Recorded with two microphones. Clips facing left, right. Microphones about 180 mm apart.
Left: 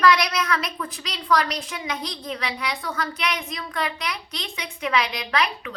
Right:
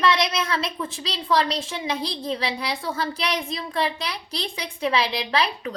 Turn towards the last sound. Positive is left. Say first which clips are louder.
# right 1 dB
turn(degrees=-30)  # may be behind; listen again after turning